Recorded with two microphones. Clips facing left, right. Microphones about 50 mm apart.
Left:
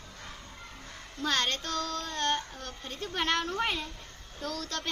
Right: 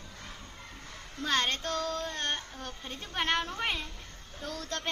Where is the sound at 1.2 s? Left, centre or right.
Right.